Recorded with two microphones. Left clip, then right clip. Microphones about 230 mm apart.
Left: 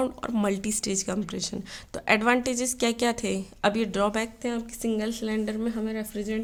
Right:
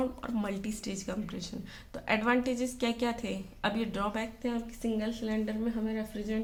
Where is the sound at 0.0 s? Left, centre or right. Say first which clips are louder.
Left 7 dB; left.